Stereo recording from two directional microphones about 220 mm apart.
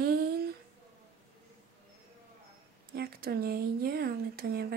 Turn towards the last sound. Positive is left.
turn(degrees=-45)  # may be behind; listen again after turning